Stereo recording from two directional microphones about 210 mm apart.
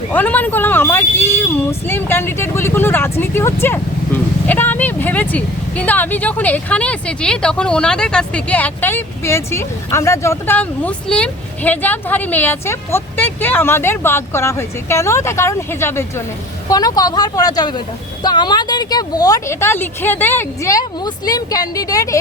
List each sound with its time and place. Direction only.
0.1 s speech: 10° left (ahead or behind)